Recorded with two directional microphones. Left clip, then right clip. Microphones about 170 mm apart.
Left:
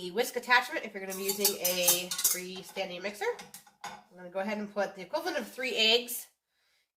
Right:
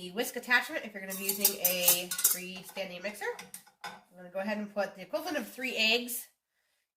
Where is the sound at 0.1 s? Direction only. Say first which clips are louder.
Left 2 dB; 20° left (ahead or behind).